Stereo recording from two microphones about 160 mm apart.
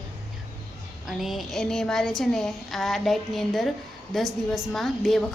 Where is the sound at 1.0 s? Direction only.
Centre (ahead or behind).